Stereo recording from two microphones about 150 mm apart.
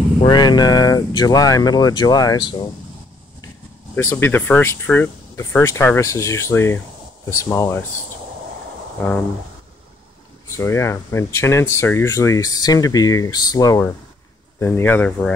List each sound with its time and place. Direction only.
0.2 s speech: 30° left (ahead or behind)
3.9 s speech: 15° left (ahead or behind)
10.5 s speech: 20° left (ahead or behind)